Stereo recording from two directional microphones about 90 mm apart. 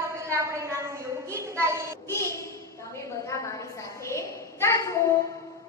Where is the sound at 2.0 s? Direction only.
30° left (ahead or behind).